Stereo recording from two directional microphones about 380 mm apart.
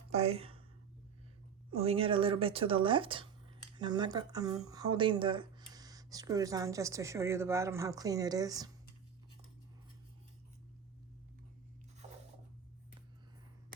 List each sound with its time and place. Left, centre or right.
0.1 s speech: centre
1.8 s speech: centre